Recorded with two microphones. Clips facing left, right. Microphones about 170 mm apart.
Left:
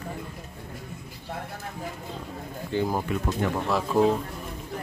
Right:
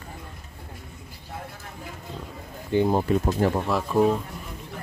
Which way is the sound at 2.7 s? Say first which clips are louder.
Right 5 dB; 20° right (ahead or behind).